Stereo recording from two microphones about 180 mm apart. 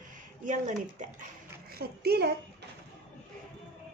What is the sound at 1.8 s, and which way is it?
Speech, 60° right (ahead or behind).